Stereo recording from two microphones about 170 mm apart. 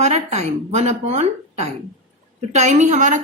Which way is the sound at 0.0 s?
40° right (ahead or behind).